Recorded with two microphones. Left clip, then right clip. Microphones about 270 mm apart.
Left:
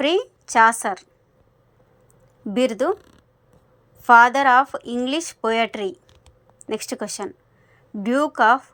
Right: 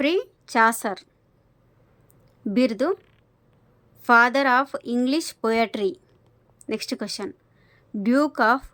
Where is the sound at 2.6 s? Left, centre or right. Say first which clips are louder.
Left 2 dB; centre.